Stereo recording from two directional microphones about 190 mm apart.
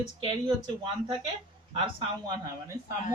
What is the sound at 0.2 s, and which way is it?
Speech, 30° right (ahead or behind).